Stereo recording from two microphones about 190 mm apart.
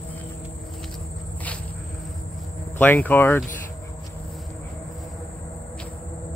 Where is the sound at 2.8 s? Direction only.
10° left (ahead or behind).